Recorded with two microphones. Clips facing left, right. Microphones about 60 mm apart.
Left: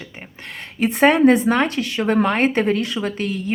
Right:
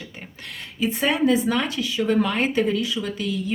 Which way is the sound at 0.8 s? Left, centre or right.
Left.